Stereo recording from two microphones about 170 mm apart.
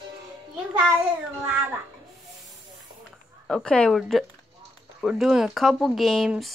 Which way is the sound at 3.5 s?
5° left (ahead or behind).